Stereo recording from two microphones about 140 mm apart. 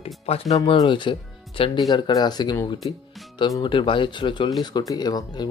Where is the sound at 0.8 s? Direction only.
35° left (ahead or behind).